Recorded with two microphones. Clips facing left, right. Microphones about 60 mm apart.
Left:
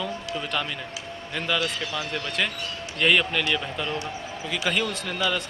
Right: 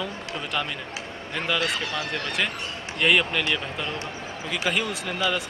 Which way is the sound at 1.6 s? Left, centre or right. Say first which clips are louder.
Right 2 dB; right.